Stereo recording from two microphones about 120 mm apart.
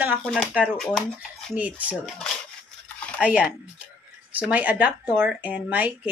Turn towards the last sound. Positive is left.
turn(degrees=-15)  # may be behind; listen again after turning